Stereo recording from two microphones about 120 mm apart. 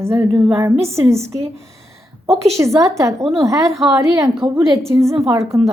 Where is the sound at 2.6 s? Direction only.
25° right (ahead or behind).